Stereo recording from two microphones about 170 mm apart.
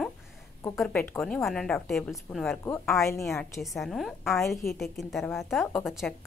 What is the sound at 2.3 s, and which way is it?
Speech, 15° left (ahead or behind).